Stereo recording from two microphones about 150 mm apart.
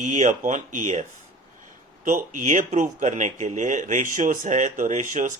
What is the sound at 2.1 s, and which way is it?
Speech, 55° right (ahead or behind).